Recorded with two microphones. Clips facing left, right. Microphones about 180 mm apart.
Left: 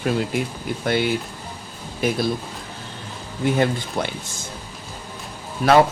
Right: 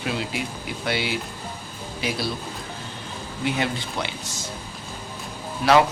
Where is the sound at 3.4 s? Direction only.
50° left (ahead or behind).